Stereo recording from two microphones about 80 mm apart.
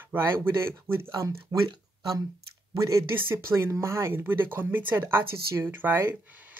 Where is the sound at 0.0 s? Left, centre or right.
Right.